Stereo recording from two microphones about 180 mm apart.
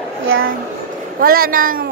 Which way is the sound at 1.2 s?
55° right (ahead or behind).